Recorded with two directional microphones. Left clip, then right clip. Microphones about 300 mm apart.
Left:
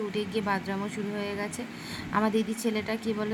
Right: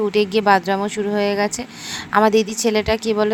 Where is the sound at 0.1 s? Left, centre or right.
Right.